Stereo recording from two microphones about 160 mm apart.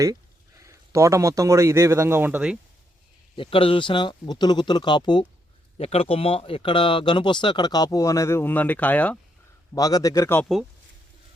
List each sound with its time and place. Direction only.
0.6 s speech: 20° right (ahead or behind)
3.3 s speech: 35° left (ahead or behind); by 9.1 s 10° left (ahead or behind)
9.7 s speech: 20° left (ahead or behind)